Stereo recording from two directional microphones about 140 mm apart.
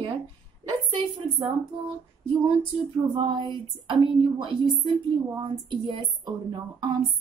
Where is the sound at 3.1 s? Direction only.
35° right (ahead or behind).